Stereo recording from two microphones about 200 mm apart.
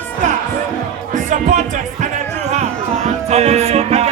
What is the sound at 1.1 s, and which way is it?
Music, 40° right (ahead or behind).